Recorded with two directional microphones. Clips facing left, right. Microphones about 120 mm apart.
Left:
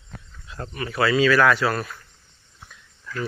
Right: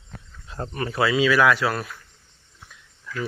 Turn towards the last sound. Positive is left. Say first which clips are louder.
# even
turn(degrees=-5)  # may be behind; listen again after turning